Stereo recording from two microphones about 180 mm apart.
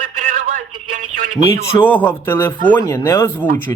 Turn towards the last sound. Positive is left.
turn(degrees=15)  # may be behind; listen again after turning